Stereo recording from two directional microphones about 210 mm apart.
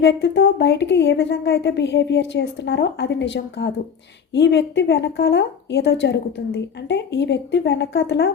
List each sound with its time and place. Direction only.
0.0 s a woman's voice: 55° left (ahead or behind)